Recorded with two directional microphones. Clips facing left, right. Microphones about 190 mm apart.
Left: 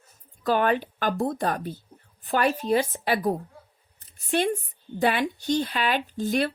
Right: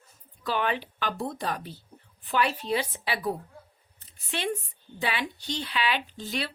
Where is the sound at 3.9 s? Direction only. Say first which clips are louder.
Left 10 dB; 45° left (ahead or behind).